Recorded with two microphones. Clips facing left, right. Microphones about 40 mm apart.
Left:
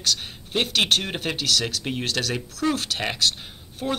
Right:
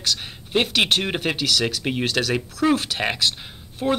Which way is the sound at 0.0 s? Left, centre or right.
Centre.